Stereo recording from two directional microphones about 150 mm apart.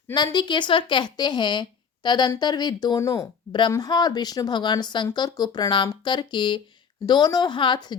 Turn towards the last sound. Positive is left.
turn(degrees=30)  # may be behind; listen again after turning